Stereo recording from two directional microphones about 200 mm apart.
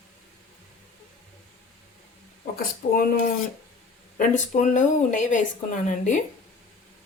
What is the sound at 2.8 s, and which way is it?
Speech, 40° left (ahead or behind).